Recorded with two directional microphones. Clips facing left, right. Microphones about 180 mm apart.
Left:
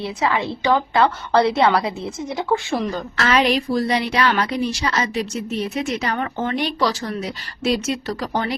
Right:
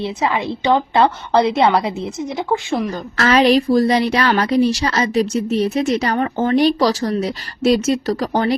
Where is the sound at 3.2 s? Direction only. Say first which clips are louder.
Right 6 dB; 40° right (ahead or behind).